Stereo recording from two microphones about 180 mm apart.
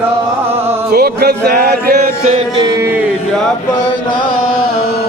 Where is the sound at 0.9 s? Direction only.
60° right (ahead or behind).